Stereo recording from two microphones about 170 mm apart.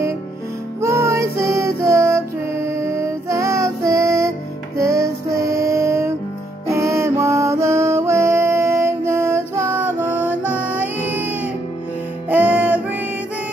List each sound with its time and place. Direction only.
0.7 s music: 15° right (ahead or behind)